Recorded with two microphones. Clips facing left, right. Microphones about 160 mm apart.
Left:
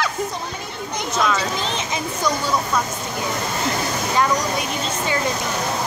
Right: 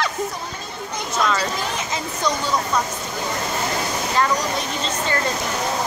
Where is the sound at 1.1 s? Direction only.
Centre (ahead or behind).